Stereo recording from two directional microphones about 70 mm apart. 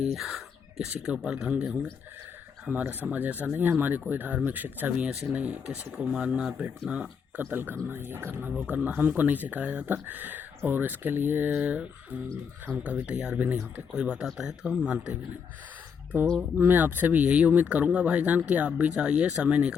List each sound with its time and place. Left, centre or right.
0.0 s speech: centre
2.8 s speech: right
16.4 s speech: right
17.2 s speech: centre